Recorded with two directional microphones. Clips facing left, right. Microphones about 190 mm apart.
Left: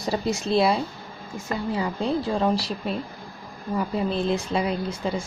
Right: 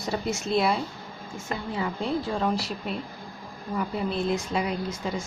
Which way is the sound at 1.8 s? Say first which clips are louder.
Left 1 dB; 35° left (ahead or behind).